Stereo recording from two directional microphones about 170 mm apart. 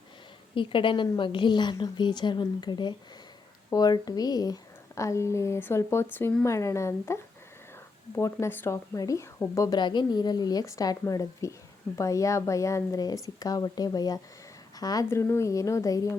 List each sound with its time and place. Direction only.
0.5 s a woman's voice: 30° left (ahead or behind)